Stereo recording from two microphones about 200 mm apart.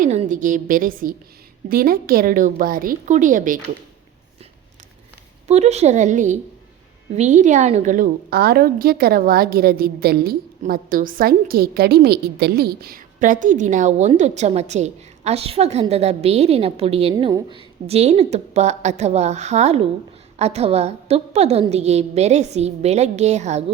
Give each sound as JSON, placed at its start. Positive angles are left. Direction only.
{"t": 0.0, "sound": "a sound", "side_deg": -35}
{"t": 1.7, "sound": "a woman's voice", "side_deg": -45}
{"t": 5.5, "sound": "a woman's voice", "side_deg": -35}